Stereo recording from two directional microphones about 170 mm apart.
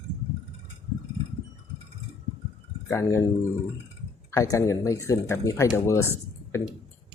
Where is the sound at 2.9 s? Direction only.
15° left (ahead or behind).